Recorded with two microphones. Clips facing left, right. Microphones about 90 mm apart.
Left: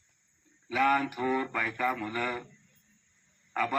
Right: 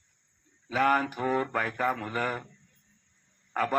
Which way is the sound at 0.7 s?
40° right (ahead or behind).